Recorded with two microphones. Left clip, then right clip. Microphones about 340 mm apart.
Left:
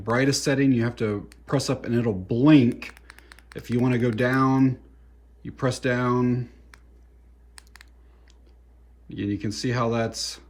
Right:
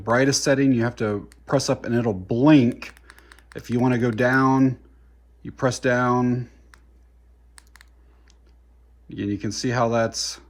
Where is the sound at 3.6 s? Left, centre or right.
Centre.